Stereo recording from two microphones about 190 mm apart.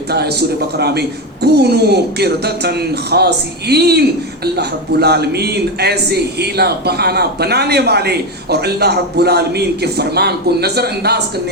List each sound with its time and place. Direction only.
0.1 s a man's voice: 55° right (ahead or behind)